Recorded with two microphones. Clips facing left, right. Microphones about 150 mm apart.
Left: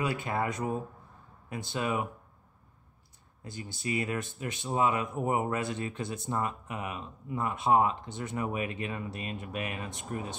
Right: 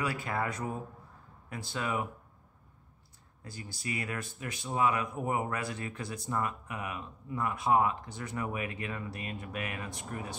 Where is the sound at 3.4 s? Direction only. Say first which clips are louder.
Left 4 dB; 20° left (ahead or behind).